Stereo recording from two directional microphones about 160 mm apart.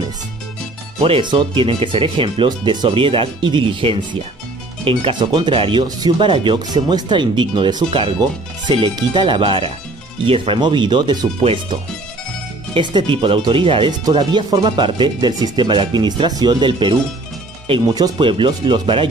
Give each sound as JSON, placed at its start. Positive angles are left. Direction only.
{"t": 1.0, "sound": "speech", "side_deg": -30}
{"t": 12.7, "sound": "speech", "side_deg": -30}